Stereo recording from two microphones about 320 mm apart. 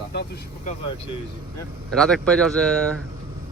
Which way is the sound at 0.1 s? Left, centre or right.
Left.